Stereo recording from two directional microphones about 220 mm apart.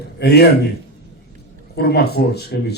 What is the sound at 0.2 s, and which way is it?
Speech, 45° left (ahead or behind).